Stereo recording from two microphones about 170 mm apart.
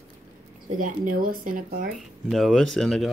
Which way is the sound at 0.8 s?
55° right (ahead or behind).